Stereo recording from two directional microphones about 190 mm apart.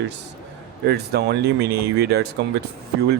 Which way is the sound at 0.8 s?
55° right (ahead or behind).